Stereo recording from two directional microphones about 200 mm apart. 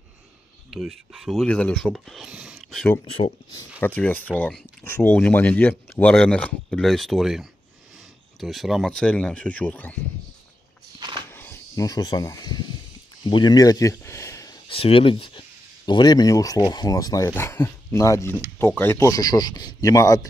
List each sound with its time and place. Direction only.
0.7 s speech: centre (ahead or behind)
11.0 s walk: 25° right (ahead or behind)
11.2 s a sound: 10° left (ahead or behind)
13.2 s speech: 20° left (ahead or behind)